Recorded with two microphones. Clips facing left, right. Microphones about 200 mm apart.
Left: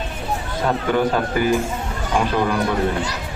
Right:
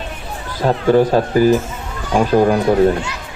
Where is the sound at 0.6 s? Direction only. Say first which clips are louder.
Right 7 dB; 35° right (ahead or behind).